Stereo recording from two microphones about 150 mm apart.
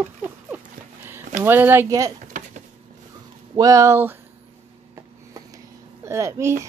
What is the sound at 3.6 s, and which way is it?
Speech, 20° right (ahead or behind).